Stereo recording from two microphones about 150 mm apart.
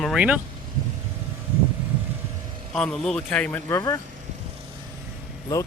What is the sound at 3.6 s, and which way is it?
Speech, 20° left (ahead or behind).